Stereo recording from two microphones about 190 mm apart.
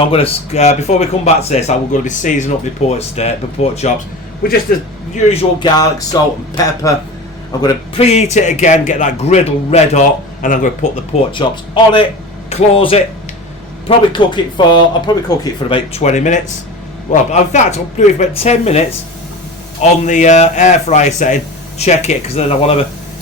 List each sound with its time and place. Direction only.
0.0 s speech: 30° left (ahead or behind)
5.1 s speech: 30° left (ahead or behind)
8.0 s speech: 35° left (ahead or behind)
11.3 s speech: 25° left (ahead or behind)
15.7 s speech: 35° left (ahead or behind)